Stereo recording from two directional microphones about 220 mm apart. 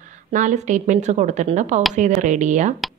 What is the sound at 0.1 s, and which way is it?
A woman's voice, 35° right (ahead or behind).